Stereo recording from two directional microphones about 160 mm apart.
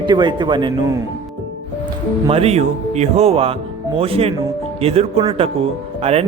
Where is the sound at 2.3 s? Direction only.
40° right (ahead or behind).